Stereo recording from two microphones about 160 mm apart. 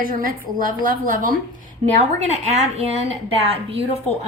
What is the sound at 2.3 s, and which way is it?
A woman's voice, 45° right (ahead or behind).